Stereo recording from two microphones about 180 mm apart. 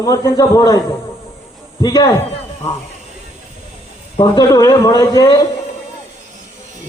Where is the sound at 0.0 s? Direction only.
20° left (ahead or behind).